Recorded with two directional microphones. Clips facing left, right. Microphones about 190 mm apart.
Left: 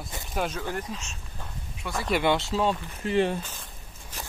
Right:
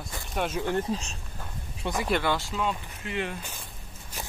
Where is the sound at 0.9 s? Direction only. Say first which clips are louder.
Right 7 dB; 35° right (ahead or behind).